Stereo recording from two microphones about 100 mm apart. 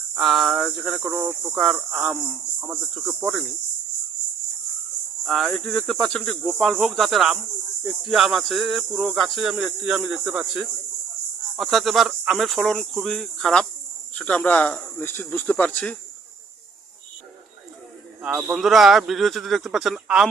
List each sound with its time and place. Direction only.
0.2 s cricket: centre (ahead or behind)
1.1 s speech: 15° right (ahead or behind)
1.5 s cricket: centre (ahead or behind)
5.2 s cricket: centre (ahead or behind)
14.2 s speech: 15° left (ahead or behind)
18.2 s cricket: 10° right (ahead or behind)